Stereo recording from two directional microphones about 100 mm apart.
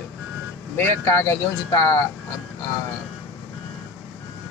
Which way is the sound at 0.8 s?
25° left (ahead or behind).